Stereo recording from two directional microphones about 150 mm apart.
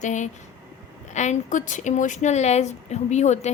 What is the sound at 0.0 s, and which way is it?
A woman's voice, 55° left (ahead or behind).